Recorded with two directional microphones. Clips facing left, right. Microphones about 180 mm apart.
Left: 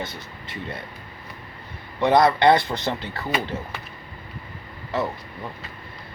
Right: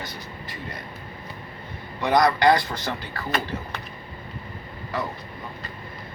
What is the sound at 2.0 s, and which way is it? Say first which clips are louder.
Speech: left 3 dB; 25° left (ahead or behind).